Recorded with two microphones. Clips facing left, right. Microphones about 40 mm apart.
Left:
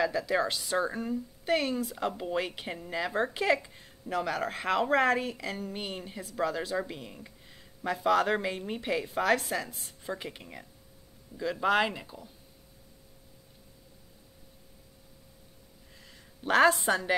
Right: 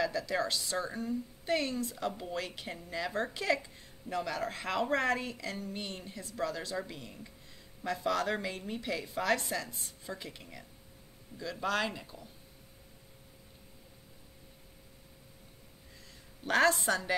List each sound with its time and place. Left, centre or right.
0.0 s speech: centre
2.0 s a woman's voice: left
9.0 s a woman's voice: centre
10.0 s speech: left
11.3 s speech: centre
16.1 s a sound: centre
16.8 s speech: left